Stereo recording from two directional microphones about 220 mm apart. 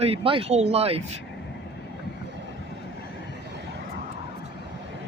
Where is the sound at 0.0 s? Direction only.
25° right (ahead or behind).